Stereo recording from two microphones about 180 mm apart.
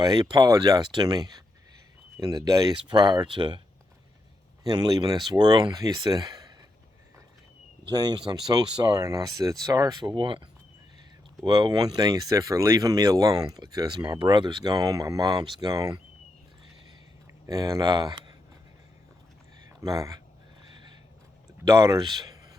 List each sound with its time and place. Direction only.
0.0 s speech: 25° right (ahead or behind)
4.6 s speech: 20° right (ahead or behind)
7.9 s speech: 25° right (ahead or behind)
17.4 s speech: 15° right (ahead or behind)
19.8 s speech: 20° right (ahead or behind)
21.6 s speech: 20° right (ahead or behind)